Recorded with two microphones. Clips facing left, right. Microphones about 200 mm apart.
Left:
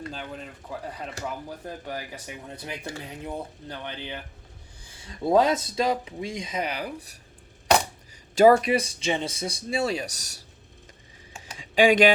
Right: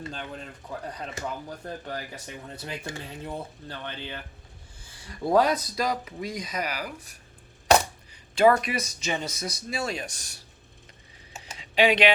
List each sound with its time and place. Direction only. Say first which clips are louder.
0.0 s speech: left 1 dB; 5° left (ahead or behind); by 7.2 s 30° left (ahead or behind)
8.4 s speech: left 4 dB; 35° left (ahead or behind)
11.5 s a sound: left 3 dB; 45° left (ahead or behind)